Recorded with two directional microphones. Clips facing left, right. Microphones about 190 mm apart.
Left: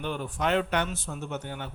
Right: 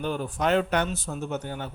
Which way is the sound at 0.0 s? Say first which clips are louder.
Right 3 dB; 40° right (ahead or behind).